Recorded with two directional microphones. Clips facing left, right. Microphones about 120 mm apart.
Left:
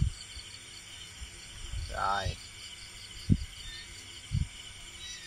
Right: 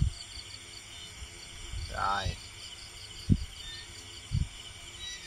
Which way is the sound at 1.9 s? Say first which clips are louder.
Even; 5° right (ahead or behind).